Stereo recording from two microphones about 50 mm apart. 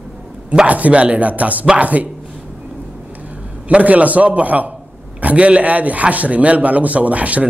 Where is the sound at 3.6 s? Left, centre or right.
Right.